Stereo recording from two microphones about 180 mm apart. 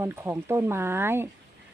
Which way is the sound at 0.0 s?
15° right (ahead or behind).